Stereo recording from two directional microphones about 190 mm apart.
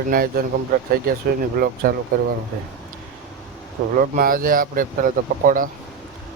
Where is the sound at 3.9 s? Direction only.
50° right (ahead or behind).